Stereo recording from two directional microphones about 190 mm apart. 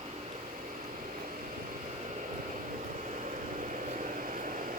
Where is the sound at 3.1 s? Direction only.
35° right (ahead or behind).